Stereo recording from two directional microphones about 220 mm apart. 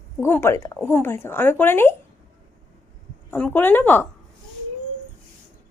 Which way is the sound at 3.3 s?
5° left (ahead or behind).